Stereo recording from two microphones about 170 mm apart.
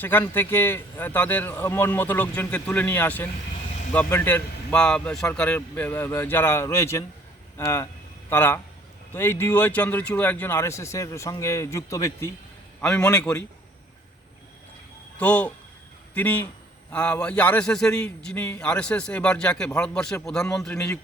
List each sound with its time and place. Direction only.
0.0 s a man's voice: 10° left (ahead or behind)
12.8 s a man's voice: 5° left (ahead or behind)
15.2 s a man's voice: 10° left (ahead or behind)